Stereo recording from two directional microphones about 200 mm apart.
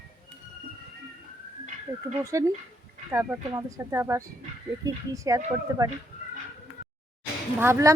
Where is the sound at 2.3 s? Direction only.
15° right (ahead or behind).